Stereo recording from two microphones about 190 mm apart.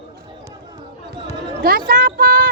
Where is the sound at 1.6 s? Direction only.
50° right (ahead or behind).